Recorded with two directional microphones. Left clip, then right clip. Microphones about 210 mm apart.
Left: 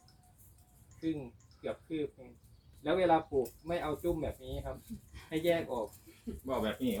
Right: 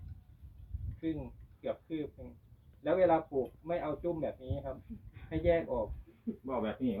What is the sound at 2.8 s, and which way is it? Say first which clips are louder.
Speech: right 1 dB; 25° left (ahead or behind).